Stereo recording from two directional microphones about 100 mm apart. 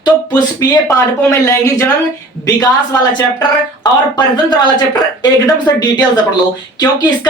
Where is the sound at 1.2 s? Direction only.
30° left (ahead or behind).